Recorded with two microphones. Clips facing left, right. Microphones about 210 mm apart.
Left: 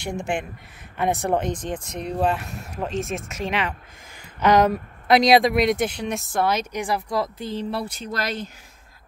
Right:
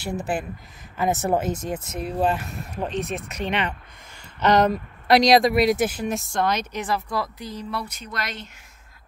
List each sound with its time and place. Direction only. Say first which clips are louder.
0.0 s speech: even; 5° right (ahead or behind); by 7.2 s 15° left (ahead or behind)
7.3 s speech: left 4 dB; 25° left (ahead or behind)